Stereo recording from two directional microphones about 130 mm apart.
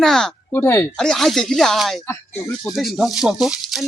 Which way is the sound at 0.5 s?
15° left (ahead or behind).